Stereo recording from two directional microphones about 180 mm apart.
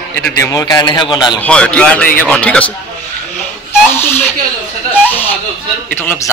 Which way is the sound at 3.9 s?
10° left (ahead or behind).